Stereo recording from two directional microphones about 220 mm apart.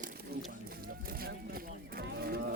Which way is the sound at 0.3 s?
45° right (ahead or behind).